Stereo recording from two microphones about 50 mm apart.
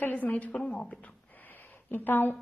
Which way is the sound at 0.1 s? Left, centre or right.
Left.